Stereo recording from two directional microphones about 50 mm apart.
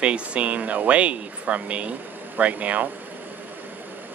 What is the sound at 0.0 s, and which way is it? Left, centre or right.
Speech, right.